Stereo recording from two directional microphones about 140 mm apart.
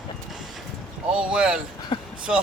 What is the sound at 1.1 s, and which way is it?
Speech, 5° right (ahead or behind).